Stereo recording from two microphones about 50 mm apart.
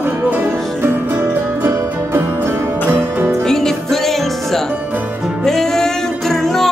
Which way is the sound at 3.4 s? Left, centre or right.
Centre.